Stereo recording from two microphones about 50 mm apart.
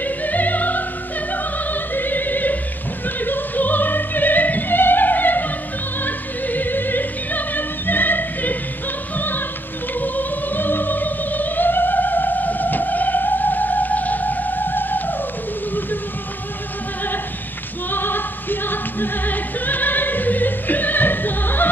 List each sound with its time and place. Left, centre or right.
0.0 s opera: left
9.9 s music: left
17.9 s music: left